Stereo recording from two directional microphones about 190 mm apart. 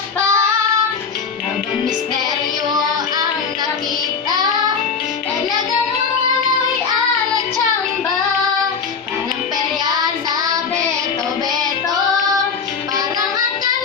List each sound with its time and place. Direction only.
0.2 s child singing: 15° right (ahead or behind)
9.8 s child singing: 20° right (ahead or behind)